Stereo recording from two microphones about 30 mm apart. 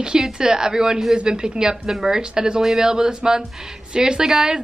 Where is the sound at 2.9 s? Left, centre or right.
Right.